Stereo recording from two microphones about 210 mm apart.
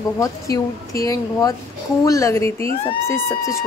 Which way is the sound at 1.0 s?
15° left (ahead or behind).